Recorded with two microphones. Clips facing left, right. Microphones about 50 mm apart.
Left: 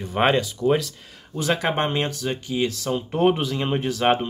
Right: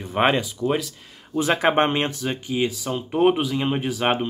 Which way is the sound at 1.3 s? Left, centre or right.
Right.